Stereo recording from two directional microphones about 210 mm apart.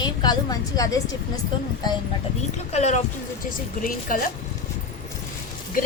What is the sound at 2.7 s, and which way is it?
A woman's voice, 30° left (ahead or behind).